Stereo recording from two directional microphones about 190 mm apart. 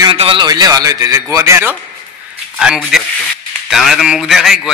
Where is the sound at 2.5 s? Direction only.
5° right (ahead or behind).